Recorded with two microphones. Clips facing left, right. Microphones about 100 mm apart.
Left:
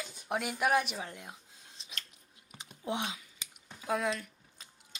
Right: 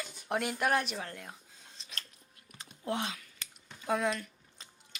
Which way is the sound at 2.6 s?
15° left (ahead or behind).